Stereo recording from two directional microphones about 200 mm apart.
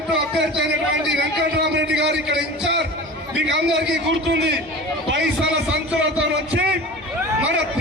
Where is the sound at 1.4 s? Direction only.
60° right (ahead or behind).